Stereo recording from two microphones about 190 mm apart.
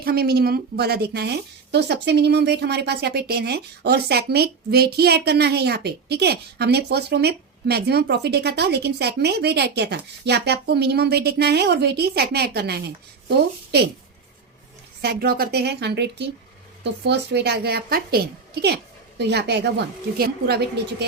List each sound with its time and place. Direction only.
0.0 s a woman's voice: 55° right (ahead or behind)
15.0 s a woman's voice: 55° right (ahead or behind)
19.2 s a woman's voice: 60° right (ahead or behind)